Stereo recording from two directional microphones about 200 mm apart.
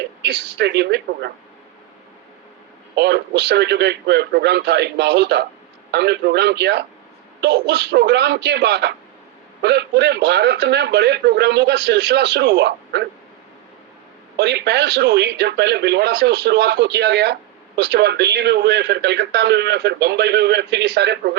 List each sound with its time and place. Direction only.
0.2 s a man's voice: 55° right (ahead or behind)
2.9 s a man's voice: 55° right (ahead or behind)
14.3 s a man's voice: 55° right (ahead or behind)